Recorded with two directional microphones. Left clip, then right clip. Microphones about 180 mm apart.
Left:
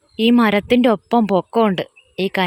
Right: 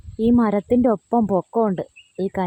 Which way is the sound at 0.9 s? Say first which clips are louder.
Left 4 dB; 20° left (ahead or behind).